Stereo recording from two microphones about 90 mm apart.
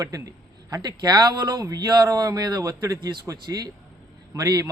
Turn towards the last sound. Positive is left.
turn(degrees=-40)  # may be behind; listen again after turning